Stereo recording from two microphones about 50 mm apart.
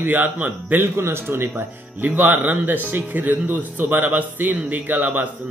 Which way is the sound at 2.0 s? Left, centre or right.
Right.